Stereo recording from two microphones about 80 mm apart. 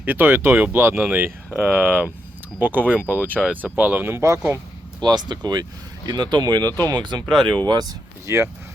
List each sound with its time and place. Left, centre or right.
0.0 s speech: right
3.1 s speech: left
3.5 s speech: right
5.0 s speech: right
8.3 s speech: right